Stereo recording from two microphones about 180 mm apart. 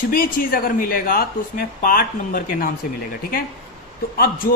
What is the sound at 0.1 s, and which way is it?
Speech, 55° left (ahead or behind).